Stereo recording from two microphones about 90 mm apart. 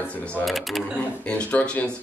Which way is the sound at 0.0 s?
15° left (ahead or behind).